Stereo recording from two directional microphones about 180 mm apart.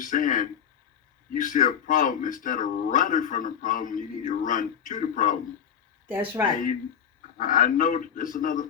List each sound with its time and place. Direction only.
0.0 s a man's voice: 45° left (ahead or behind)
6.1 s speech: 10° right (ahead or behind)
7.3 s a man's voice: 50° left (ahead or behind)